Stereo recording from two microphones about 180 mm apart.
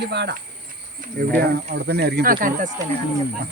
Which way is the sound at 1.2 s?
50° right (ahead or behind).